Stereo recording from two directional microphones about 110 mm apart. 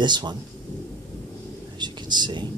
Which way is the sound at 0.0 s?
40° right (ahead or behind).